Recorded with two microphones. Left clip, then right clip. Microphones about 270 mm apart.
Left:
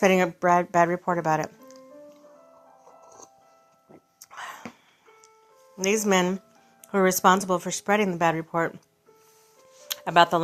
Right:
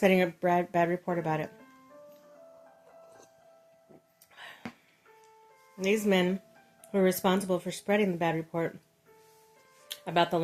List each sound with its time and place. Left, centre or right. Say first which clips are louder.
0.0 s speech: left 5 dB; centre
4.3 s a sound: left 10 dB; centre
5.8 s speech: left 4 dB; centre
9.9 s speech: left 8 dB; centre